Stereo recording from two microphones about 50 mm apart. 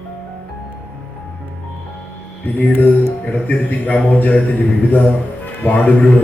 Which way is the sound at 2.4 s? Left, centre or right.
Left.